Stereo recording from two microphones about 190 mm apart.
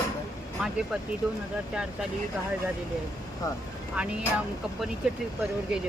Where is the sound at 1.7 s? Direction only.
5° right (ahead or behind).